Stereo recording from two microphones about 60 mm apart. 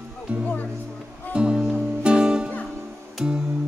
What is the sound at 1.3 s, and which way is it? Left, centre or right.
Music, centre.